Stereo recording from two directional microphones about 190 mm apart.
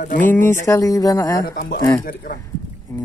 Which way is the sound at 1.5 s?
50° left (ahead or behind).